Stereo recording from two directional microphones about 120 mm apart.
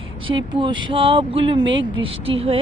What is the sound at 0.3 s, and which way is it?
Speech, 40° right (ahead or behind).